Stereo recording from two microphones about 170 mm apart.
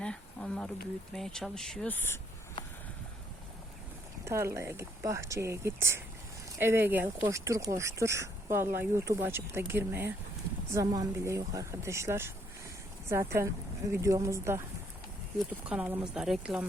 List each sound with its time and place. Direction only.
0.0 s a sound: 5° left (ahead or behind)
1.1 s speech: centre (ahead or behind)
4.3 s speech: 15° right (ahead or behind)
15.7 s speech: 10° right (ahead or behind)